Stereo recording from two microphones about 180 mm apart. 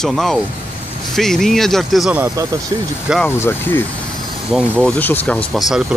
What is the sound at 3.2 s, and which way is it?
Speech, 10° left (ahead or behind).